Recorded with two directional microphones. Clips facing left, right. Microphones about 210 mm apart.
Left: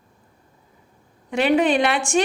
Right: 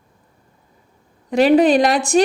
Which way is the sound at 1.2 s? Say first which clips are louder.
Right 6 dB; 40° right (ahead or behind).